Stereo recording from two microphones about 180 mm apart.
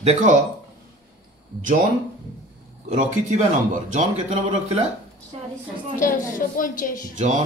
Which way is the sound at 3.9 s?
40° right (ahead or behind).